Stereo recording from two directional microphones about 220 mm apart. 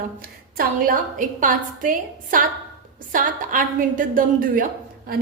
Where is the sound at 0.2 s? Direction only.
40° right (ahead or behind).